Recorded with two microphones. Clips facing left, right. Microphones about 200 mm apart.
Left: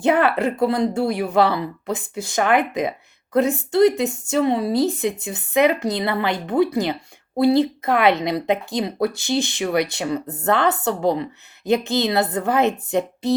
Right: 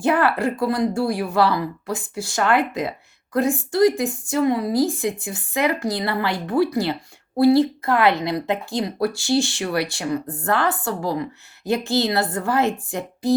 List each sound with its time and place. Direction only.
0.0 s speech: 20° left (ahead or behind)